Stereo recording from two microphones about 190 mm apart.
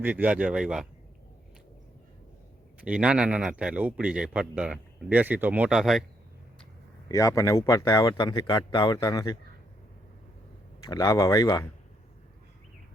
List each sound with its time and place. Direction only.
0.0 s a man's voice: 10° right (ahead or behind)
2.8 s a man's voice: 5° right (ahead or behind)
7.1 s speech: 15° left (ahead or behind)
10.8 s speech: 20° left (ahead or behind)